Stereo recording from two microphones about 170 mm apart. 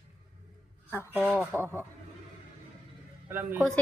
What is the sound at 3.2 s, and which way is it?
Speech, 10° right (ahead or behind).